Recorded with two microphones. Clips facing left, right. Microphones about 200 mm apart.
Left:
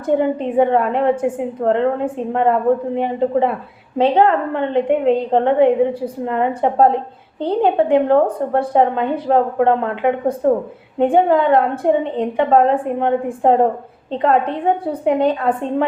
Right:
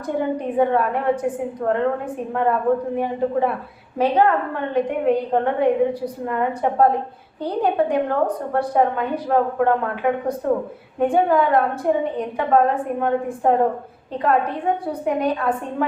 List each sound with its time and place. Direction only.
0.2 s a woman's voice: 25° left (ahead or behind)